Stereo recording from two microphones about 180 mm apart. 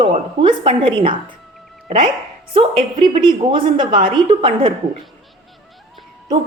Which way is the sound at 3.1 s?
25° right (ahead or behind).